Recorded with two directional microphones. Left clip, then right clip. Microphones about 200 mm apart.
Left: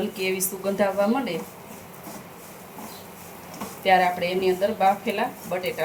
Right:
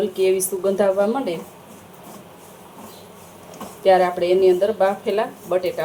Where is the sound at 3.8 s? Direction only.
30° right (ahead or behind).